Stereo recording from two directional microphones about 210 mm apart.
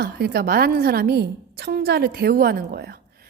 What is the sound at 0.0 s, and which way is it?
Speech, 50° right (ahead or behind).